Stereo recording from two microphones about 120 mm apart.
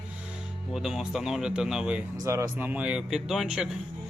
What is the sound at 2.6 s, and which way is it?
Speech, 10° right (ahead or behind).